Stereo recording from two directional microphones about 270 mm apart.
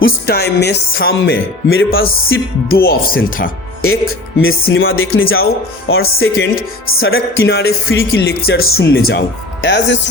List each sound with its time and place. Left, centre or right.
0.0 s speech: left
3.8 s speech: left